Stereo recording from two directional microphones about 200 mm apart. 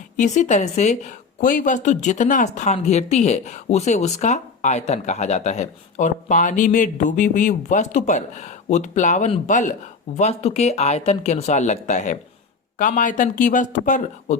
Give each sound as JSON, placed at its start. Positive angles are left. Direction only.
{"t": 0.2, "sound": "a woman's voice", "side_deg": 35}